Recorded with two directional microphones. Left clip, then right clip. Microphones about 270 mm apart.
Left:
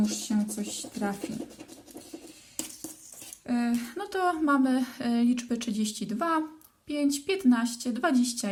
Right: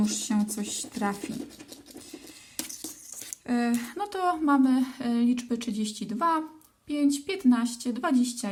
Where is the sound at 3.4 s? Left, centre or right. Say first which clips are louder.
Right 2 dB; centre.